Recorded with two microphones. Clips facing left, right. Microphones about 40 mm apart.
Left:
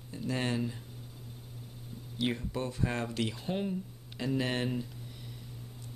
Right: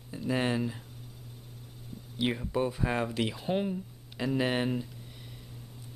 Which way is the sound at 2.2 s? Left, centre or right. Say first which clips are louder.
Right 4 dB; centre.